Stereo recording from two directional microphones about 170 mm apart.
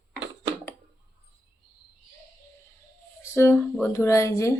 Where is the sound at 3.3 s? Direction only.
15° left (ahead or behind).